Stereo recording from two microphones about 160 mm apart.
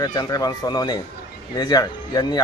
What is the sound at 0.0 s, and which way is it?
Speech, 25° left (ahead or behind).